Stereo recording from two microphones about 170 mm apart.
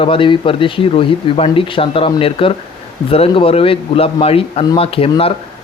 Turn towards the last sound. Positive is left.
turn(degrees=35)  # may be behind; listen again after turning